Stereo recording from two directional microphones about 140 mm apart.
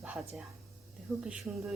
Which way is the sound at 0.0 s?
10° right (ahead or behind).